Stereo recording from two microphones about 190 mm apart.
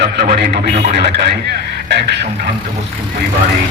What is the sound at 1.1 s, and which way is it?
A man's voice, 60° right (ahead or behind).